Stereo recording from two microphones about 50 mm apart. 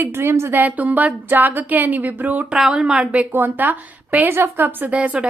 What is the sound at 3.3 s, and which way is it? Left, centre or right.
A woman's voice, right.